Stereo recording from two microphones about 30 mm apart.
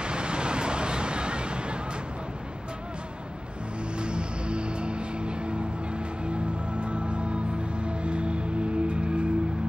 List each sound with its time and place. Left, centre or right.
0.0 s vehicle: right
4.0 s music: right